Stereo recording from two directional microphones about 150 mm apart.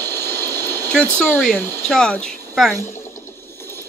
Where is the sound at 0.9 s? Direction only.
5° left (ahead or behind).